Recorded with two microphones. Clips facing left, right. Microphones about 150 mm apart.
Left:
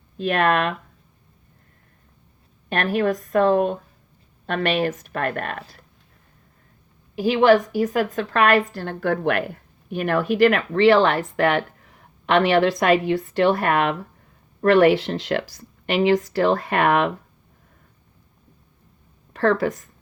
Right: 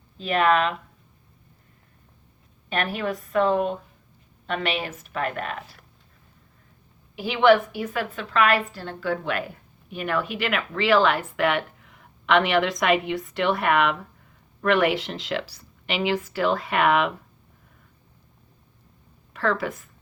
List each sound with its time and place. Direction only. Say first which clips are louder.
0.2 s speech: left 1 dB; 55° left (ahead or behind)
2.6 s a woman's voice: left 6 dB; 50° left (ahead or behind)
7.2 s a woman's voice: left 2 dB; 40° left (ahead or behind)
19.3 s a woman's voice: left 6 dB; 35° left (ahead or behind)